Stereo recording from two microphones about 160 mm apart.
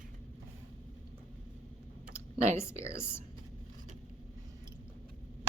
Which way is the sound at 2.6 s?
15° left (ahead or behind).